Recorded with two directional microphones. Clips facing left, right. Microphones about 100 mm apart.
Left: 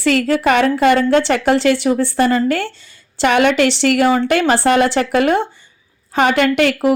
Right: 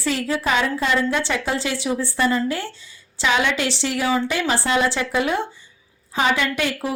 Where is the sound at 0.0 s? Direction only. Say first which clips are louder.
Left 8 dB; 70° left (ahead or behind).